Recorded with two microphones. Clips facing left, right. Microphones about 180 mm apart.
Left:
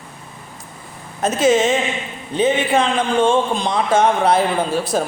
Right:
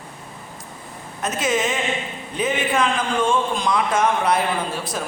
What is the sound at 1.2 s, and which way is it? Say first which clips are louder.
A man's voice: left 7 dB; 30° left (ahead or behind).